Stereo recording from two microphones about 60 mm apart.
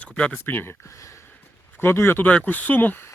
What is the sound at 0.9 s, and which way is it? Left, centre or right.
Speech, left.